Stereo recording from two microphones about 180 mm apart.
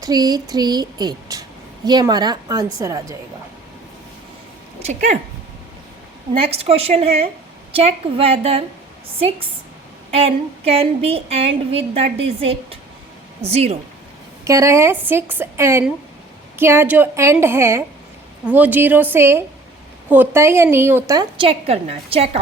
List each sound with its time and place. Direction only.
0.0 s a woman's voice: 20° right (ahead or behind)
4.8 s a woman's voice: 40° right (ahead or behind)
6.4 s a woman's voice: 35° right (ahead or behind)
10.1 s a woman's voice: 35° right (ahead or behind)
14.4 s a woman's voice: 15° right (ahead or behind); by 22.4 s 35° right (ahead or behind)